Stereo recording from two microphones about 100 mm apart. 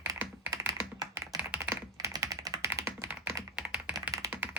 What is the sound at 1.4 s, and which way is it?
Typing, 15° right (ahead or behind).